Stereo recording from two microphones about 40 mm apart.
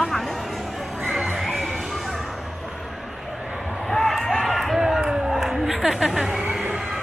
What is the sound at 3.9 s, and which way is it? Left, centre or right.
Run, centre.